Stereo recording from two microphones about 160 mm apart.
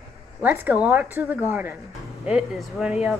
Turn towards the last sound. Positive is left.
turn(degrees=-5)  # may be behind; listen again after turning